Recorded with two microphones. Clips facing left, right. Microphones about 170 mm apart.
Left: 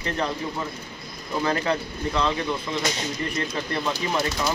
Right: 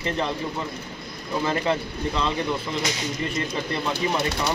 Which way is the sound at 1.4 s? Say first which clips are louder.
Even; 5° right (ahead or behind).